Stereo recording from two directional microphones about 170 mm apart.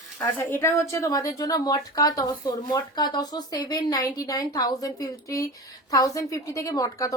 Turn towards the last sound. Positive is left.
turn(degrees=20)  # may be behind; listen again after turning